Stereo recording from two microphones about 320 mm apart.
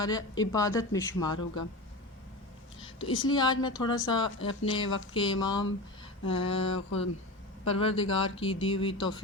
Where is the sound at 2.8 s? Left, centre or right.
Centre.